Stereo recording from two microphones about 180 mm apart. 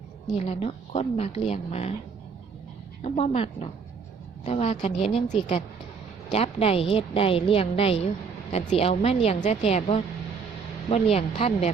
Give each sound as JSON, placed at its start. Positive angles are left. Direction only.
{"t": 0.3, "sound": "a woman's voice", "side_deg": 35}
{"t": 3.0, "sound": "a woman's voice", "side_deg": 35}